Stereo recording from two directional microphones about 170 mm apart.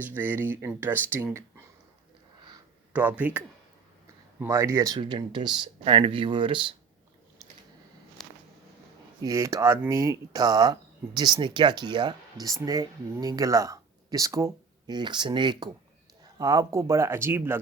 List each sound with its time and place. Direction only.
0.0 s speech: 10° right (ahead or behind)
2.9 s speech: 10° right (ahead or behind); by 6.7 s 30° right (ahead or behind)
9.2 s speech: 20° right (ahead or behind)